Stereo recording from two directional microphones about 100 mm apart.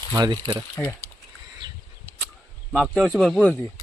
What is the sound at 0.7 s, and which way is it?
Speech, 30° left (ahead or behind).